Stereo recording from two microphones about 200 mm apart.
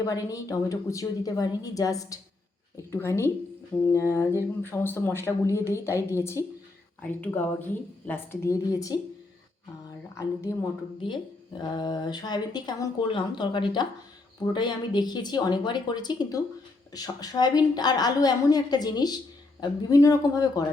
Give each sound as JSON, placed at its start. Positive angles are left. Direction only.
{"t": 0.0, "sound": "speech", "side_deg": 15}
{"t": 10.5, "sound": "speech", "side_deg": 20}